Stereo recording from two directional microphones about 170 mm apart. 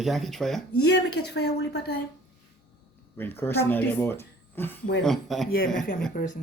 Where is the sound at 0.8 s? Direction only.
75° left (ahead or behind).